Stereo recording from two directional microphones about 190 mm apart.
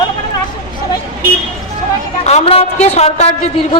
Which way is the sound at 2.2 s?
35° left (ahead or behind).